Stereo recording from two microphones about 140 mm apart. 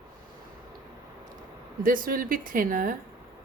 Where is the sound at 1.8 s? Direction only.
85° right.